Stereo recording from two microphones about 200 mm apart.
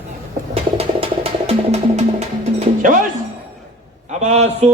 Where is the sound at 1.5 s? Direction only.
35° right (ahead or behind).